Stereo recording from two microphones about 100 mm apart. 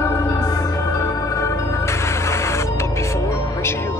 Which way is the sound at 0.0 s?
30° left (ahead or behind).